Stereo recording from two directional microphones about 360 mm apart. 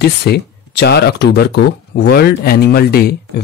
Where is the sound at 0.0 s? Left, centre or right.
Left.